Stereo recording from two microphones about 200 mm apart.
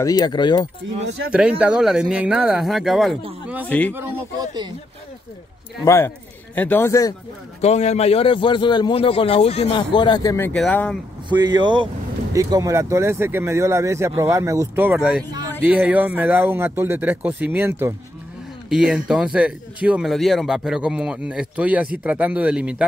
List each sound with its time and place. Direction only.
0.0 s a man's voice: 20° left (ahead or behind)
1.0 s speech: 60° right (ahead or behind)
1.6 s speech: 5° right (ahead or behind)
3.9 s speech: 20° right (ahead or behind)
5.9 s speech: 10° left (ahead or behind)
7.6 s a man's voice: 35° left (ahead or behind); by 10.5 s 15° left (ahead or behind)
10.5 s speech: 5° left (ahead or behind)
11.2 s speech: 20° right (ahead or behind); by 22.8 s 5° right (ahead or behind)